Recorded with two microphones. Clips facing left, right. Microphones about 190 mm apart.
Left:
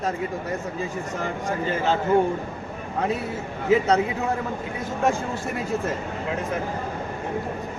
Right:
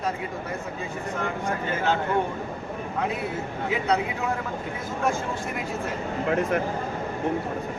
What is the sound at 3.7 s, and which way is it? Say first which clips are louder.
Speech: left 6 dB; 40° left (ahead or behind).